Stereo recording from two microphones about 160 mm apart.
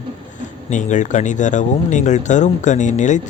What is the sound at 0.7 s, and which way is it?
Speech, 50° left (ahead or behind).